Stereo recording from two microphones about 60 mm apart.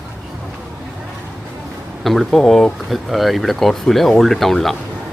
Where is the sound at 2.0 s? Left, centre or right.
Centre.